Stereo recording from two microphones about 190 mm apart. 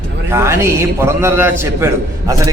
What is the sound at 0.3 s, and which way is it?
A man's voice, 15° right (ahead or behind).